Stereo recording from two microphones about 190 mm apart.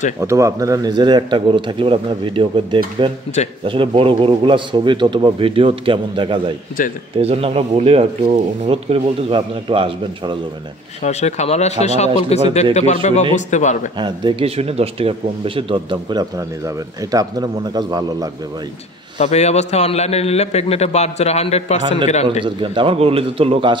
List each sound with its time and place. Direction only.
0.2 s speech: 15° right (ahead or behind)
11.1 s a man's voice: 35° left (ahead or behind)
13.9 s speech: 25° right (ahead or behind)
19.1 s a man's voice: 35° left (ahead or behind)
22.4 s speech: 25° right (ahead or behind)